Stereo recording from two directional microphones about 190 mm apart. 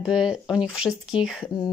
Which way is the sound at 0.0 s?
5° right (ahead or behind).